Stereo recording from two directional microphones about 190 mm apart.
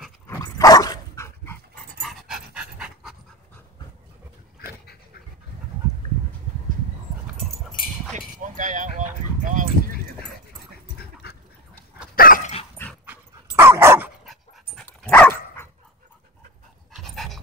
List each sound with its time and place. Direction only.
0.3 s dog: 15° left (ahead or behind)
2.0 s dog: centre (ahead or behind)
8.4 s dog: 40° right (ahead or behind)
11.2 s duck: 55° left (ahead or behind)
12.2 s dog: 45° left (ahead or behind)
13.0 s dog: 10° right (ahead or behind)
14.2 s dog: centre (ahead or behind)
16.9 s pant: centre (ahead or behind)